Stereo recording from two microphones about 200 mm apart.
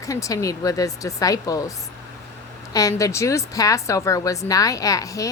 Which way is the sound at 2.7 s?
15° left (ahead or behind).